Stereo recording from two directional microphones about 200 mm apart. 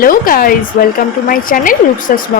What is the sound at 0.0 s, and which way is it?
A woman's voice, 45° left (ahead or behind).